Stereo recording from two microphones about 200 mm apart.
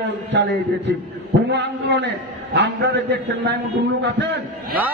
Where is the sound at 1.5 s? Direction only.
60° right (ahead or behind).